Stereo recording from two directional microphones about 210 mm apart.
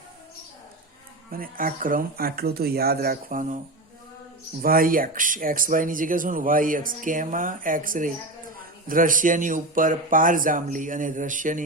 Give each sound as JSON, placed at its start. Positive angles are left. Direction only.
{"t": 1.3, "sound": "speech", "side_deg": -40}
{"t": 4.6, "sound": "speech", "side_deg": -45}